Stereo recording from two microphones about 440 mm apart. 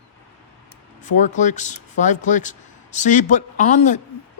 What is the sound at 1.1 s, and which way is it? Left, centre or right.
Speech, centre.